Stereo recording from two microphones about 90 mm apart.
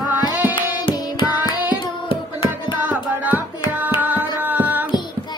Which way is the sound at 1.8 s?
70° left (ahead or behind).